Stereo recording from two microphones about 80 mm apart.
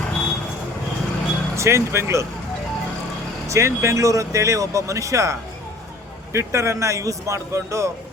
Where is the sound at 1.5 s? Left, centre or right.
Right.